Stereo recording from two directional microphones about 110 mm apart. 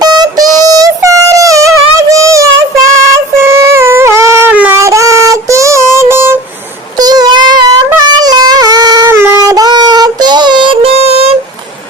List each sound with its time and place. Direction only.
0.0 s music: 35° right (ahead or behind)
2.0 s child singing: 30° right (ahead or behind)
3.4 s a sound: 25° right (ahead or behind)
4.7 s child singing: 25° right (ahead or behind)
6.9 s a sound: 35° right (ahead or behind)
9.0 s child singing: 25° right (ahead or behind)
9.4 s child singing: 35° right (ahead or behind); by 11.3 s 65° right (ahead or behind)